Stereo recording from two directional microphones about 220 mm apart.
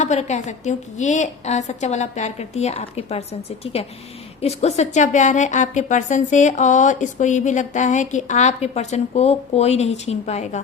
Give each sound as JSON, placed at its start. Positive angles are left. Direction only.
{"t": 0.0, "sound": "a woman's voice", "side_deg": 30}